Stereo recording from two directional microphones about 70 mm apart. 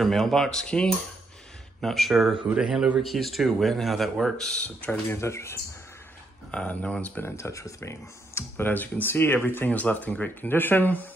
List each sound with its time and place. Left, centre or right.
0.0 s speech: centre
3.0 s speech: centre
4.6 s speech: centre
5.1 s speech: left
6.5 s speech: centre
7.2 s speech: left
8.6 s speech: left